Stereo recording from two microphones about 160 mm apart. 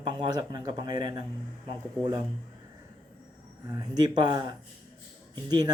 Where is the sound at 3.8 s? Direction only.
25° right (ahead or behind).